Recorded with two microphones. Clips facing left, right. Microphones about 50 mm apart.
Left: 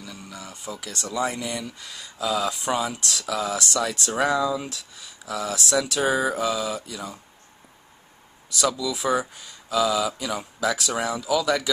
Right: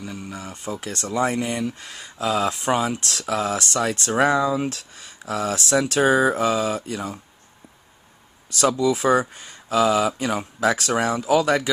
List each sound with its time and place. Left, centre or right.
0.0 s speech: right
4.6 s speech: right
8.5 s speech: right